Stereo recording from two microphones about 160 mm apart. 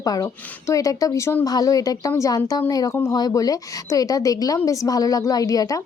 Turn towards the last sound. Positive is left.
turn(degrees=20)  # may be behind; listen again after turning